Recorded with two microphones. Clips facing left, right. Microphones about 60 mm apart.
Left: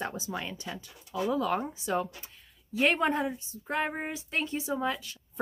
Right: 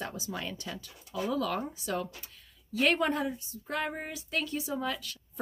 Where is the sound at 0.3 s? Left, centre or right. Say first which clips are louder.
Left 1 dB; centre.